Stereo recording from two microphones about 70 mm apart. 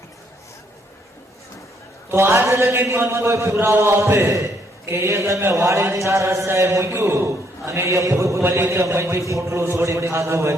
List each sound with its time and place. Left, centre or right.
2.0 s a man's voice: right
4.3 s a man's voice: right